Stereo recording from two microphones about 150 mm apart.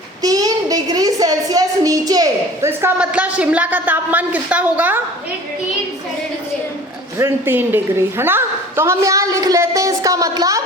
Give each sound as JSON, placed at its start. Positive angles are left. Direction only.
{"t": 0.2, "sound": "speech", "side_deg": -25}
{"t": 7.2, "sound": "a woman's voice", "side_deg": -15}